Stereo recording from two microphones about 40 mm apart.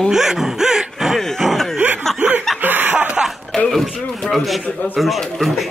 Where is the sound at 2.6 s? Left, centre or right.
Right.